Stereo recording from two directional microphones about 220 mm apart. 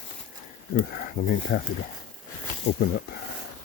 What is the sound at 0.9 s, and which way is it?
Speech, 40° left (ahead or behind).